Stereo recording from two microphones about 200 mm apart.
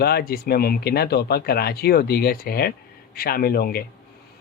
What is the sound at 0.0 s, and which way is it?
Speech, 50° left (ahead or behind).